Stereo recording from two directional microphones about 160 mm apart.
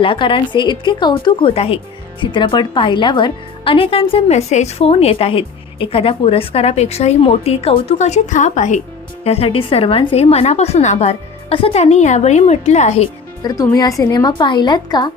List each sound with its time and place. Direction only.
0.0 s a woman's voice: 30° left (ahead or behind); by 8.8 s 50° left (ahead or behind)
9.2 s a woman's voice: 40° left (ahead or behind)
13.4 s speech: 25° left (ahead or behind)